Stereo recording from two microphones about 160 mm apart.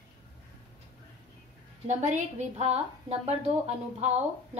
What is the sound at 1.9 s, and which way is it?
A woman's voice, 50° right (ahead or behind).